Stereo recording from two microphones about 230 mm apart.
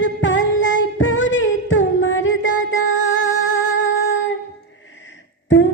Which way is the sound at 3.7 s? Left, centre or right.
Left.